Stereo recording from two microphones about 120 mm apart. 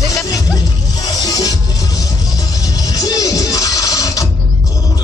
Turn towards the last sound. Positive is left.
turn(degrees=30)  # may be behind; listen again after turning